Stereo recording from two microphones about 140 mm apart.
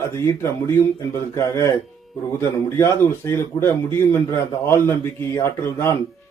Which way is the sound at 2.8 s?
15° left (ahead or behind).